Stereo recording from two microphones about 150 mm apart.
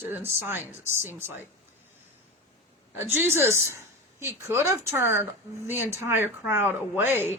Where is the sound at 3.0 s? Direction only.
15° right (ahead or behind).